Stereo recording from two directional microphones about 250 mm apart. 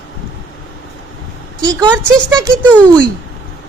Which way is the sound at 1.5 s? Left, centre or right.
Centre.